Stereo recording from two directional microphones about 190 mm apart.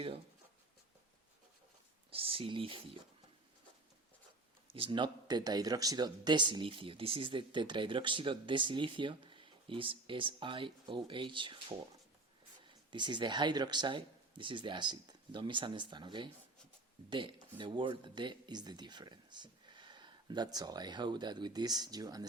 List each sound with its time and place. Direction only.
2.0 s speech: 30° right (ahead or behind)
4.7 s speech: 25° right (ahead or behind)
12.9 s speech: 25° right (ahead or behind)